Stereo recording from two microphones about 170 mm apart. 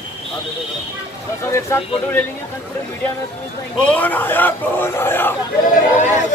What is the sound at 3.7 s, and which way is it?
Speech, 10° left (ahead or behind).